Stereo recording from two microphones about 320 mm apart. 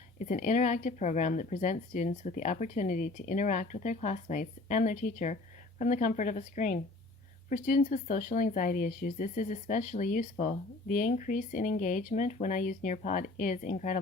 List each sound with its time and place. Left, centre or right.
0.3 s speech: left